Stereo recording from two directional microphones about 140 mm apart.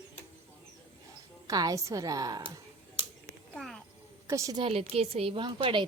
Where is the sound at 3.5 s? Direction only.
5° left (ahead or behind).